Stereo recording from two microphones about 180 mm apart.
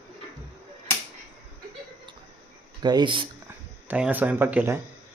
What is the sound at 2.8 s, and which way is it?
Speech, 25° right (ahead or behind).